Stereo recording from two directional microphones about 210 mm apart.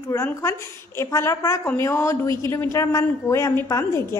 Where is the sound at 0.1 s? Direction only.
15° left (ahead or behind).